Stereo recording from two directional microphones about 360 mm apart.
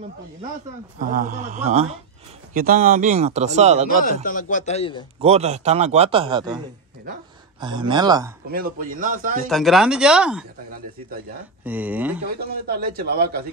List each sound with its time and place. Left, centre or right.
0.9 s speech: right
4.0 s a man's voice: left
5.2 s a man's voice: centre
7.6 s a man's voice: centre
8.5 s speech: right
9.5 s speech: centre
11.6 s speech: centre
12.4 s speech: right